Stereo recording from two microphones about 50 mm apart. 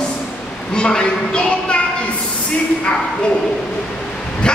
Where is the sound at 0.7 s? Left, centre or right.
Centre.